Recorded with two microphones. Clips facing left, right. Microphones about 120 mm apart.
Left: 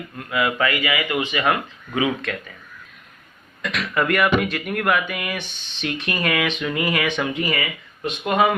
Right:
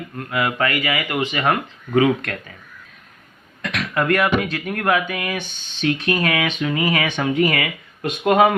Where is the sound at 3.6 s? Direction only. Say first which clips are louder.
Right 1 dB; 40° right (ahead or behind).